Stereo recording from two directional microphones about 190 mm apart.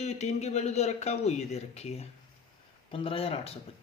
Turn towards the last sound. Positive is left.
turn(degrees=30)  # may be behind; listen again after turning